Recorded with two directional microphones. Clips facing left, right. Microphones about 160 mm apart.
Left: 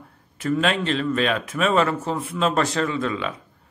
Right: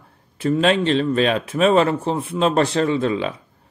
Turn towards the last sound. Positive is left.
turn(degrees=-30)  # may be behind; listen again after turning